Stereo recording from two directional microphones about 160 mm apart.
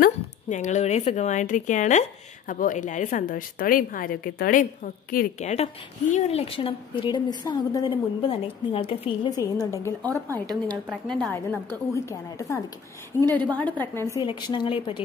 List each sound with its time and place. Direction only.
0.0 s speech: 50° left (ahead or behind)
5.4 s a woman's voice: 45° left (ahead or behind)
9.3 s a woman's voice: 25° left (ahead or behind); by 11.3 s 5° left (ahead or behind)
11.7 s a woman's voice: 20° left (ahead or behind)
14.2 s a woman's voice: 30° left (ahead or behind)